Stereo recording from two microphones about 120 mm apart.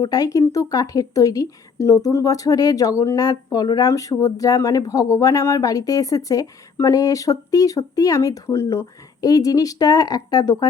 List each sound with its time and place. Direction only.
0.0 s speech: 30° left (ahead or behind)